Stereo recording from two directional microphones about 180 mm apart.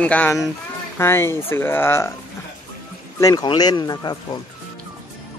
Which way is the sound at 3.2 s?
20° left (ahead or behind).